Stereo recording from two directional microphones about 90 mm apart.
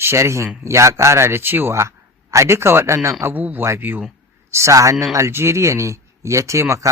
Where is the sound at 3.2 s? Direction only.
20° right (ahead or behind).